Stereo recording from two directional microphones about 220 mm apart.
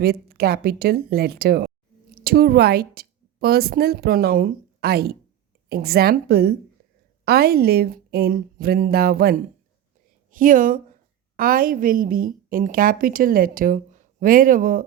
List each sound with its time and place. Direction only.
0.0 s a woman's voice: 45° right (ahead or behind)